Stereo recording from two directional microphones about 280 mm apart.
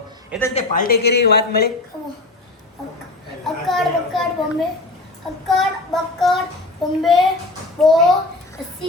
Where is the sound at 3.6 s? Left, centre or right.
Centre.